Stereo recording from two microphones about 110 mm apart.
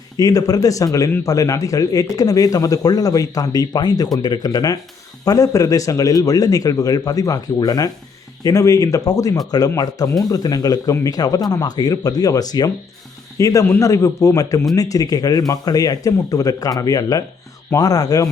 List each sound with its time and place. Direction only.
0.2 s a man's voice: 35° left (ahead or behind)